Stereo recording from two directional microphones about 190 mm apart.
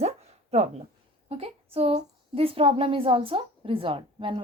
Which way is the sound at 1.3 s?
30° right (ahead or behind).